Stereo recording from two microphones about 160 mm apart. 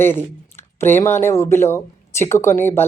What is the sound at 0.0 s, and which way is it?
A woman's voice, 15° left (ahead or behind).